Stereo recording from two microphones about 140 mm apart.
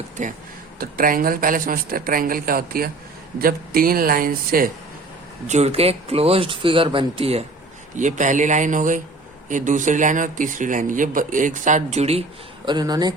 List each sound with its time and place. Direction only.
0.8 s speech: 85° right
5.5 s speech: 50° right (ahead or behind)
7.9 s speech: 60° right (ahead or behind)
12.6 s speech: 30° right (ahead or behind)